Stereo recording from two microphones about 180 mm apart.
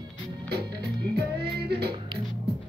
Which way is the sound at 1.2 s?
65° right (ahead or behind).